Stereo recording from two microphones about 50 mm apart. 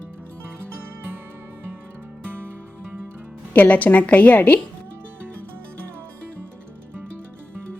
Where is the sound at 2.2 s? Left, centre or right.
Right.